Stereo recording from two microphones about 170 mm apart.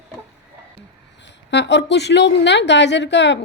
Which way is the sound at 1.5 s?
90° left.